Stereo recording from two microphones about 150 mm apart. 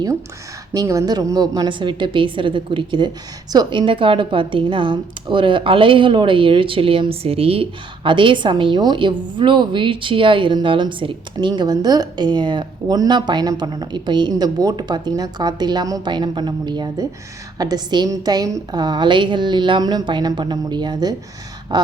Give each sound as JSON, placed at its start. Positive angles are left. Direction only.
{"t": 0.7, "sound": "a woman's voice", "side_deg": -20}